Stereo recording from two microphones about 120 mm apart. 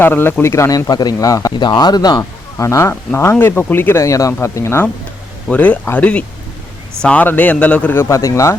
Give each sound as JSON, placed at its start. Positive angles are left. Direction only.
{"t": 0.0, "sound": "speech", "side_deg": 20}
{"t": 0.9, "sound": "speech", "side_deg": 35}
{"t": 1.5, "sound": "a man's voice", "side_deg": 40}